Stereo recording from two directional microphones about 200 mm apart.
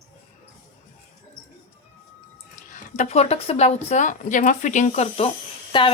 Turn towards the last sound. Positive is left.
turn(degrees=25)  # may be behind; listen again after turning